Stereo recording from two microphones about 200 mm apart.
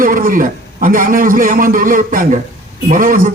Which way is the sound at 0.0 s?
45° right (ahead or behind).